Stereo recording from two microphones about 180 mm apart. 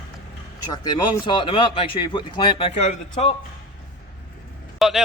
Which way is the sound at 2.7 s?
40° left (ahead or behind).